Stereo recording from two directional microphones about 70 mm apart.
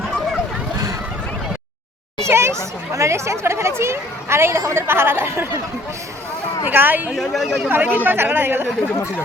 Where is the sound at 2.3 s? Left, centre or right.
Right.